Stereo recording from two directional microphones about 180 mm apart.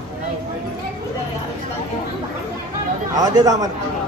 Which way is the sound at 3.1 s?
20° right (ahead or behind).